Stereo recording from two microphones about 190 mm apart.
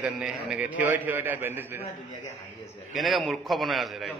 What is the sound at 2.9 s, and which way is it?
A man's voice, centre (ahead or behind).